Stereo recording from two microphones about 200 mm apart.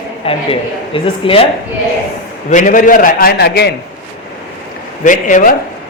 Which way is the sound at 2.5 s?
40° left (ahead or behind).